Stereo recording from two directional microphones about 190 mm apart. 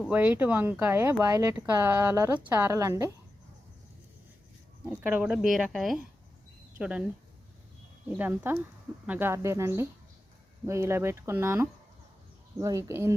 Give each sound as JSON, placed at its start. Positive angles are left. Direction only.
{"t": 0.1, "sound": "speech", "side_deg": -10}
{"t": 4.9, "sound": "speech", "side_deg": -10}
{"t": 8.1, "sound": "speech", "side_deg": -10}